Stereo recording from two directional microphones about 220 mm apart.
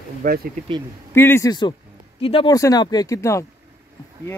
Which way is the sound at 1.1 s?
10° left (ahead or behind).